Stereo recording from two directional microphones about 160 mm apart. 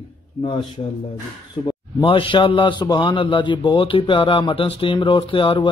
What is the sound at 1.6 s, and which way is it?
A man's voice, 30° left (ahead or behind).